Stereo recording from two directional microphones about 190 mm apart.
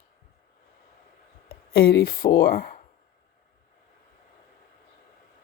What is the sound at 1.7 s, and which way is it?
Speech, 55° left (ahead or behind).